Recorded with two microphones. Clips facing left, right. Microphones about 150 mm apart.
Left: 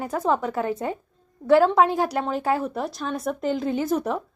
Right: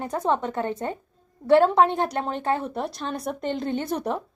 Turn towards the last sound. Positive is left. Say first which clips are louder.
# left 3 dB
turn(degrees=0)  # may be behind; listen again after turning